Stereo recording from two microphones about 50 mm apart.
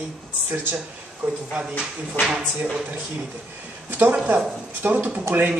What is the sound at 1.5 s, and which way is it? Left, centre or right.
Speech, centre.